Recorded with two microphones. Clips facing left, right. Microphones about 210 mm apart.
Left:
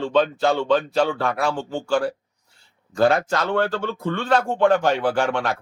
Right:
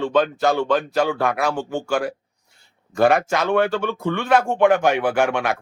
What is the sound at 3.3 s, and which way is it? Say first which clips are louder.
Speech: right 3 dB; 10° right (ahead or behind).